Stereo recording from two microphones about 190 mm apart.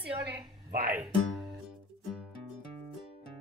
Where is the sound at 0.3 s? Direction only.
50° right (ahead or behind).